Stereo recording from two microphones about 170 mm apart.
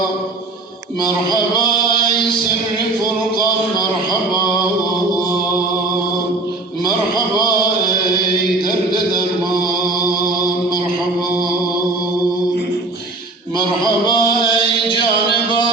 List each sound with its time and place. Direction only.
13.8 s music: 25° left (ahead or behind)